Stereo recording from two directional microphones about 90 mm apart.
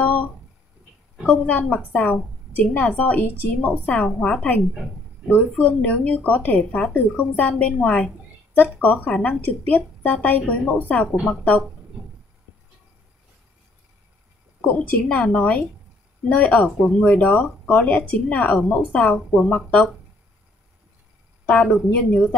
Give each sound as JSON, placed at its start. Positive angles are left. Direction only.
{"t": 0.0, "sound": "a sound", "side_deg": 15}
{"t": 1.2, "sound": "speech", "side_deg": 15}
{"t": 14.7, "sound": "speech", "side_deg": 15}